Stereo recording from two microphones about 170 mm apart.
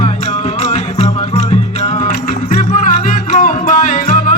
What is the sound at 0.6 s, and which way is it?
Music, 40° left (ahead or behind).